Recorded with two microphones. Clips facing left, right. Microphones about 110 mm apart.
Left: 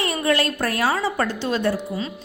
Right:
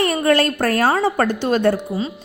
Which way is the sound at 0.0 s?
50° right (ahead or behind).